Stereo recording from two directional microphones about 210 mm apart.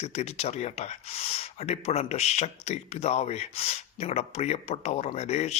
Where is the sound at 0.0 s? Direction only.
30° left (ahead or behind).